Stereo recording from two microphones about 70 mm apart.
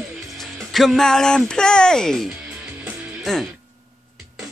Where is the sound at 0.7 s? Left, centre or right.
Centre.